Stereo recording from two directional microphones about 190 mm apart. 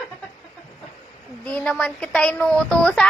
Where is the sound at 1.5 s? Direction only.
5° left (ahead or behind).